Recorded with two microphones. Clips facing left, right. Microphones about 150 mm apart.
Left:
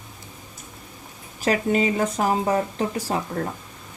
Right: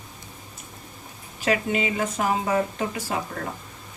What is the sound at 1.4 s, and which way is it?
Speech, 40° left (ahead or behind).